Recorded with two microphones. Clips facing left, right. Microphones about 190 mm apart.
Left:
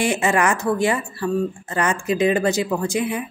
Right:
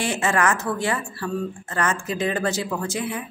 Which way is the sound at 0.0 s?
15° left (ahead or behind).